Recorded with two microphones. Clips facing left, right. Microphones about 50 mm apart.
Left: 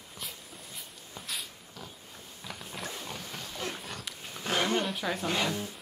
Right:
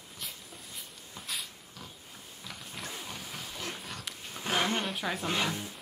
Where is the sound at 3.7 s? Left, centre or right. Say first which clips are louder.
Left 1 dB; centre.